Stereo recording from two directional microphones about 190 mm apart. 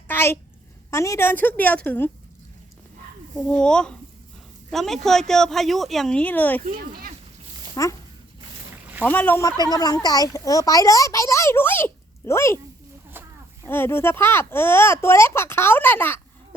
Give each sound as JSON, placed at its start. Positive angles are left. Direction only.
{"t": 0.1, "sound": "a sound", "side_deg": 10}
{"t": 0.9, "sound": "speech", "side_deg": 15}
{"t": 3.3, "sound": "speech", "side_deg": 5}
{"t": 6.6, "sound": "speech", "side_deg": -45}
{"t": 7.8, "sound": "speech", "side_deg": 20}
{"t": 9.0, "sound": "speech", "side_deg": 10}
{"t": 9.6, "sound": "speech", "side_deg": 20}
{"t": 13.2, "sound": "a sound", "side_deg": -10}
{"t": 13.7, "sound": "speech", "side_deg": 10}